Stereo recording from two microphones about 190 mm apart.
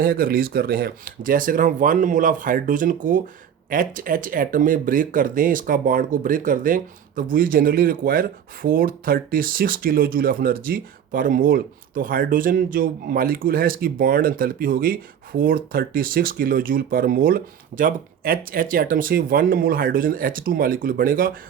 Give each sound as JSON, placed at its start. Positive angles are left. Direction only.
{"t": 0.0, "sound": "speech", "side_deg": -50}